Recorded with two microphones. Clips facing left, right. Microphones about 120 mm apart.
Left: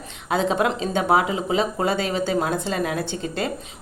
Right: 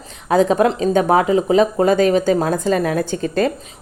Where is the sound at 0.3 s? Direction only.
40° right (ahead or behind).